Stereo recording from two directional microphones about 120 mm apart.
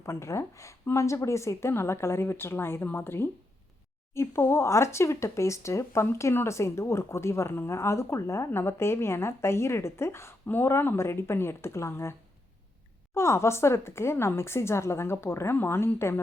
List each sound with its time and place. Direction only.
0.0 s speech: 25° left (ahead or behind)
13.1 s speech: 25° left (ahead or behind)